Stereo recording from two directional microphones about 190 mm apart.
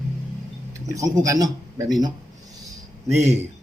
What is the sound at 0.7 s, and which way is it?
Speech, 15° right (ahead or behind).